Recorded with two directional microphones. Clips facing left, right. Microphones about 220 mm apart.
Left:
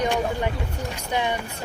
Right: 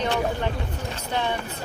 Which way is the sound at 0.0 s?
10° left (ahead or behind).